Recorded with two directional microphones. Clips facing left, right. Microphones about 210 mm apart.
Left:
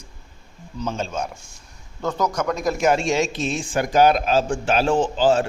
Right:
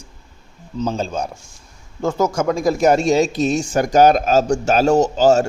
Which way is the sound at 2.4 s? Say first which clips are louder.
Right 5 dB; 30° right (ahead or behind).